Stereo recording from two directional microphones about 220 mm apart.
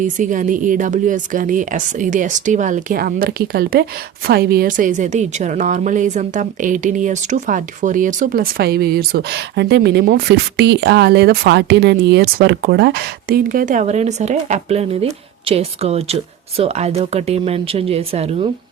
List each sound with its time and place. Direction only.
0.0 s a woman's voice: 35° right (ahead or behind)